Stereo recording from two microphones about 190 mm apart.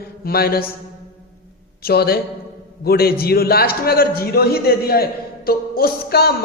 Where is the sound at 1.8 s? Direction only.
55° left (ahead or behind).